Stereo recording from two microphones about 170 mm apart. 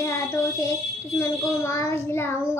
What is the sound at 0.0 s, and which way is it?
A child's voice, 20° left (ahead or behind).